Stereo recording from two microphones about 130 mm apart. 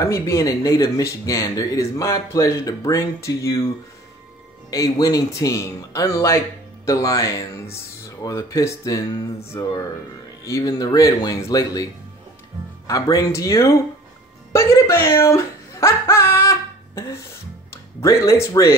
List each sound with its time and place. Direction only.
0.0 s speech: 25° left (ahead or behind)